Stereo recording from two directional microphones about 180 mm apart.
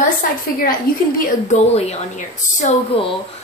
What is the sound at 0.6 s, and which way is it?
A woman's voice, 50° left (ahead or behind).